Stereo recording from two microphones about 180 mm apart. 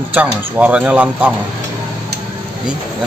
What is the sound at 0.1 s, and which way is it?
Speech, 10° right (ahead or behind).